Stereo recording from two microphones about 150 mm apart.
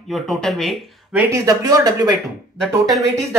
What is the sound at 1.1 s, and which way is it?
Speech, 20° right (ahead or behind).